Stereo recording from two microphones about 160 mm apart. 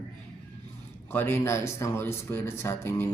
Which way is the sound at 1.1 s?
15° left (ahead or behind).